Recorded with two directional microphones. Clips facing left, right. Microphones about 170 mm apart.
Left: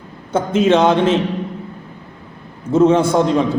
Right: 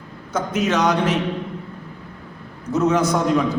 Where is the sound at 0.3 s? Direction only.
25° left (ahead or behind).